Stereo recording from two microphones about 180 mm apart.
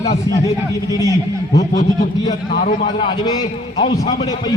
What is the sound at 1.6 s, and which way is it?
A man's voice, 40° left (ahead or behind).